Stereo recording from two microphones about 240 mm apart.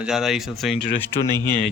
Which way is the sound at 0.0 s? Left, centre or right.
Centre.